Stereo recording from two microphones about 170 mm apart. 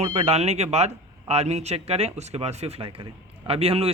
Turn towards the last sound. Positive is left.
turn(degrees=-35)  # may be behind; listen again after turning